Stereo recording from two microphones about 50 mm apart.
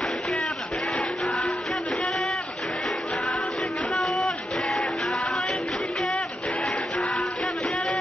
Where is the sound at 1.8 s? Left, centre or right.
Centre.